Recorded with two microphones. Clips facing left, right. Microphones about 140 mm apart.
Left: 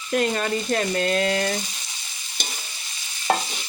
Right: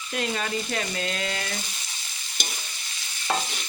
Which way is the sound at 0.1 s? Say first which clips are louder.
Left 6 dB; 50° left (ahead or behind).